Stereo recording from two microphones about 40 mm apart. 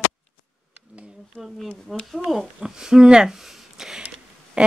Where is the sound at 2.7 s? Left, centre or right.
Centre.